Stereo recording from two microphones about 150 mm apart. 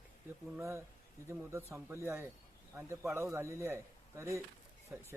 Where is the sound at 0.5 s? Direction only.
20° right (ahead or behind).